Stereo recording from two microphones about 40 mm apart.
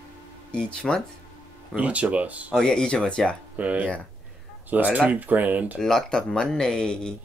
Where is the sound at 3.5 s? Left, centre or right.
Right.